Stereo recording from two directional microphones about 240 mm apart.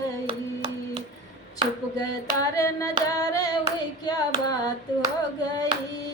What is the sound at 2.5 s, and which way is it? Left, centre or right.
Carnatic music, centre.